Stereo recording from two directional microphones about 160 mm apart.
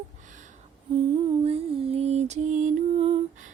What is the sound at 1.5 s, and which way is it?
Lullaby, 35° right (ahead or behind).